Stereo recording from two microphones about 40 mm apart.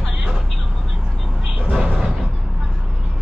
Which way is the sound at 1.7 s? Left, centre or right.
Centre.